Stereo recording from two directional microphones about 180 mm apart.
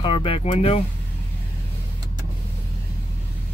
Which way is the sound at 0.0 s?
30° left (ahead or behind).